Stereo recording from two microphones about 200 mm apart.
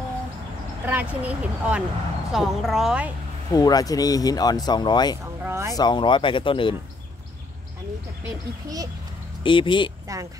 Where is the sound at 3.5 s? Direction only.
20° left (ahead or behind).